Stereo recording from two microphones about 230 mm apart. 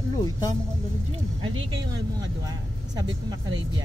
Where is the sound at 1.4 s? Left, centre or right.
Centre.